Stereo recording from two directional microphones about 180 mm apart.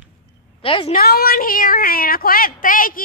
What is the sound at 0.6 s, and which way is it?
Speech, 30° left (ahead or behind).